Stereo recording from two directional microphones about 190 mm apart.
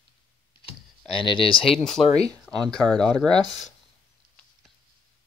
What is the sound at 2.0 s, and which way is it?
Speech, 30° left (ahead or behind).